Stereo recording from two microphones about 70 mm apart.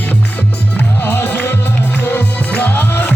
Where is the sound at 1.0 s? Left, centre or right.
Left.